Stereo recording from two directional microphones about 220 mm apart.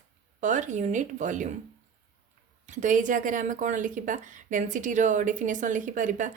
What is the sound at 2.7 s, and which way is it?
Speech, 35° right (ahead or behind).